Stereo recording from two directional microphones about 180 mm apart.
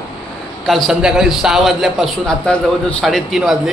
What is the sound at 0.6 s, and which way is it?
A man's voice, centre (ahead or behind).